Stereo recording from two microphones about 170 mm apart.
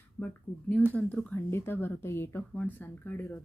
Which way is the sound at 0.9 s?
10° left (ahead or behind).